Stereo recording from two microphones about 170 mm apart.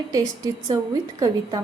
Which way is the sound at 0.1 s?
20° right (ahead or behind).